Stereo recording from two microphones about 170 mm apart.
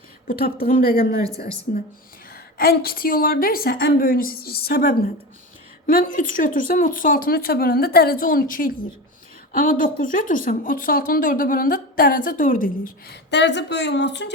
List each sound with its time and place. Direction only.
0.3 s a woman's voice: 60° left (ahead or behind)
5.8 s a woman's voice: 55° left (ahead or behind)
13.3 s speech: 90° left